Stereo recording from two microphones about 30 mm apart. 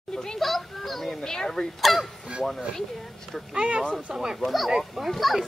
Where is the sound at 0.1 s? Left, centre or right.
Left.